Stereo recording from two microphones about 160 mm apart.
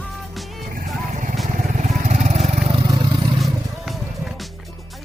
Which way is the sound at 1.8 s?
50° right (ahead or behind).